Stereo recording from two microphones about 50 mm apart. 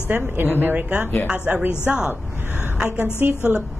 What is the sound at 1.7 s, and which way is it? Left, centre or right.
Speech, centre.